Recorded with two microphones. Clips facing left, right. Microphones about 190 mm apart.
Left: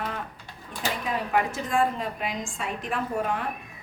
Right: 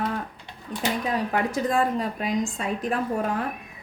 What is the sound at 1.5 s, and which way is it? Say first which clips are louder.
A woman's voice: right 2 dB; 40° right (ahead or behind).